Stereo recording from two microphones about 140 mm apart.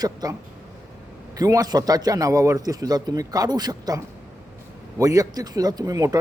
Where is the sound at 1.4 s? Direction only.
25° right (ahead or behind).